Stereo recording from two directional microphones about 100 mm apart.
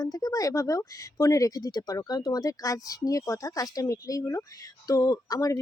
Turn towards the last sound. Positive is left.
turn(degrees=35)  # may be behind; listen again after turning